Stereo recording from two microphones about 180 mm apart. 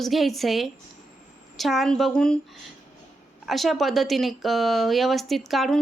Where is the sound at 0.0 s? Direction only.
Centre (ahead or behind).